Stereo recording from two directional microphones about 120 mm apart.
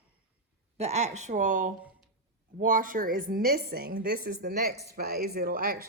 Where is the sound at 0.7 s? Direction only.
70° right (ahead or behind); by 2.9 s 90° right.